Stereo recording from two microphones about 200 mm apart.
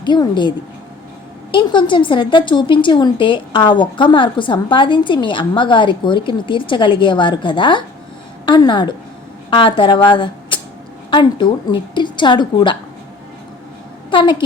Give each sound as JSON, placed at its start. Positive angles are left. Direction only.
{"t": 0.0, "sound": "a woman's voice", "side_deg": 25}
{"t": 1.5, "sound": "a woman's voice", "side_deg": 25}
{"t": 14.1, "sound": "a woman's voice", "side_deg": 25}